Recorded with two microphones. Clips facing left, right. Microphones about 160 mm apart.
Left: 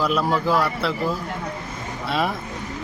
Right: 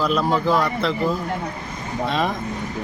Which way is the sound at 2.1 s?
10° left (ahead or behind).